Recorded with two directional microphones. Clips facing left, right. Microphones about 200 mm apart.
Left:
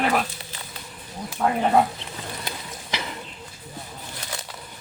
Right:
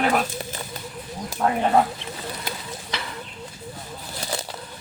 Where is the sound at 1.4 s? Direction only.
Centre (ahead or behind).